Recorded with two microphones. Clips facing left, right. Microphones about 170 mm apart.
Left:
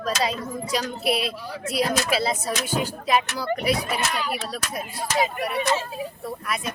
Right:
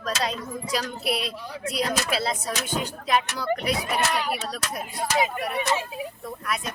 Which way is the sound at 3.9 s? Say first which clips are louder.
Right 2 dB; 60° right (ahead or behind).